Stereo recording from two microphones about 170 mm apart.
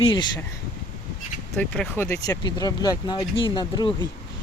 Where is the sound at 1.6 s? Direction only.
10° left (ahead or behind).